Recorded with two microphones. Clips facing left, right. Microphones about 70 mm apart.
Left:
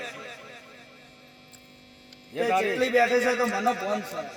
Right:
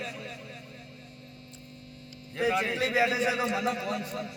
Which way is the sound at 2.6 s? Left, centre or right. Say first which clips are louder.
Left 4 dB; centre.